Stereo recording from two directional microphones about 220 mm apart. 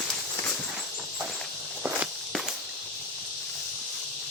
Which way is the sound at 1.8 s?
5° right (ahead or behind).